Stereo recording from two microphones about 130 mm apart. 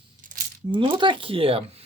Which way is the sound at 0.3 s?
90° right.